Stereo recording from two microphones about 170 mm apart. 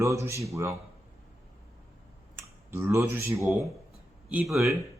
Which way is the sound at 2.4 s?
15° right (ahead or behind).